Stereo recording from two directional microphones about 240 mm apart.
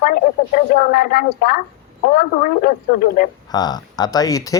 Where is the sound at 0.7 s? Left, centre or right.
Left.